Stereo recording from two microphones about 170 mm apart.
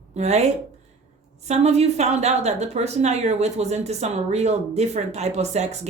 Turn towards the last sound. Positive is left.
turn(degrees=-40)  # may be behind; listen again after turning